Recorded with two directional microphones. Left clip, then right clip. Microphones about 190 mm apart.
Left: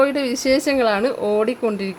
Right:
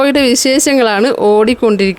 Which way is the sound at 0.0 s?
40° right (ahead or behind).